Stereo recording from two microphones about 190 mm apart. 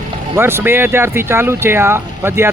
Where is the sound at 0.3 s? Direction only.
10° right (ahead or behind).